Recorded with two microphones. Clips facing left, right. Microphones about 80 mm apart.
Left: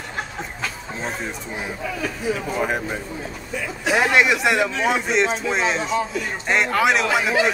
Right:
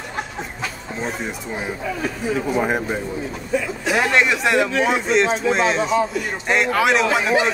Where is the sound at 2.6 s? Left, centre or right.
Right.